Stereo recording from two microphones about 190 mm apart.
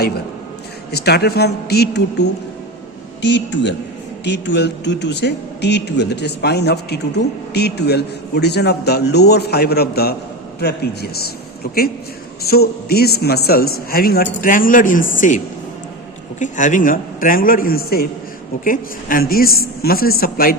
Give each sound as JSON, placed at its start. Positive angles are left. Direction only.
{"t": 0.9, "sound": "a man's voice", "side_deg": 60}
{"t": 16.4, "sound": "a man's voice", "side_deg": 40}